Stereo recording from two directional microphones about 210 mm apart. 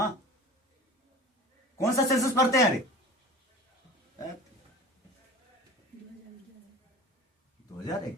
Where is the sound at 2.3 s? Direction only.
15° left (ahead or behind).